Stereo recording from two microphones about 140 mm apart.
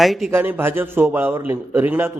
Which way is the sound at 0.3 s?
15° right (ahead or behind).